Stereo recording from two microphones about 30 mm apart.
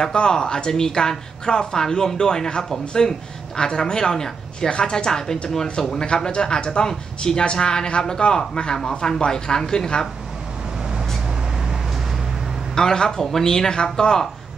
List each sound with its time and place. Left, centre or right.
0.0 s speech: left
4.6 s a woman's voice: left
4.9 s speech: left
6.9 s speech: centre
8.7 s speech: centre
12.7 s speech: centre